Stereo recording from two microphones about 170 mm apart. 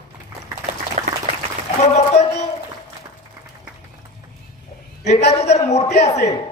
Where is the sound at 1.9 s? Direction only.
40° left (ahead or behind).